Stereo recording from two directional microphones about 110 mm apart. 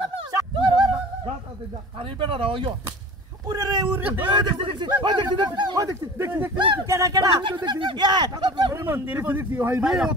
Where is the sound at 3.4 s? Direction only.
40° right (ahead or behind).